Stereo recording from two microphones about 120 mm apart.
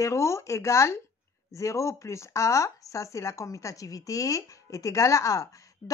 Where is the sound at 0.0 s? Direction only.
25° left (ahead or behind).